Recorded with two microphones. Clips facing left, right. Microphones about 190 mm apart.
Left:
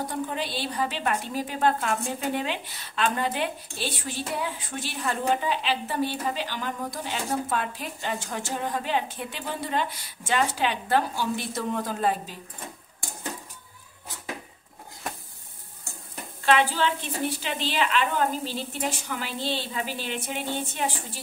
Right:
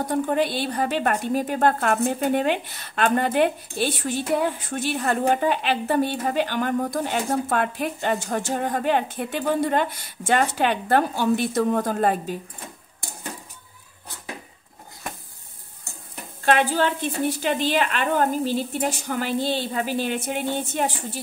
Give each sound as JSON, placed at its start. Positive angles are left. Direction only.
{"t": 0.1, "sound": "a woman's voice", "side_deg": -55}
{"t": 16.4, "sound": "a woman's voice", "side_deg": -50}